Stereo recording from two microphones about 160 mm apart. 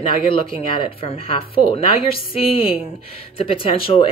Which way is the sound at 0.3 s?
35° left (ahead or behind).